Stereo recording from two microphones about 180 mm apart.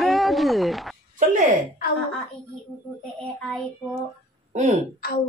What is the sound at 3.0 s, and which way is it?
Speech, 5° left (ahead or behind).